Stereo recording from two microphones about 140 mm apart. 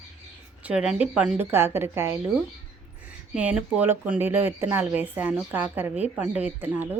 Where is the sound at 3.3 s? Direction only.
5° right (ahead or behind).